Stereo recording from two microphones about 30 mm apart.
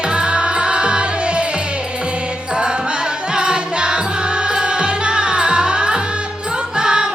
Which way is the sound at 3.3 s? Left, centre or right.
Right.